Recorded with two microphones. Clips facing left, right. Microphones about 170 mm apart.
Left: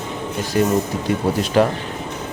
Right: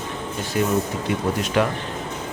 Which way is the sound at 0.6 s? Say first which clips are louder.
Left 3 dB; 40° left (ahead or behind).